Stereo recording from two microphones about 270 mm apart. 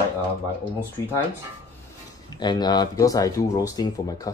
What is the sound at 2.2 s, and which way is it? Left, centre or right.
Speech, centre.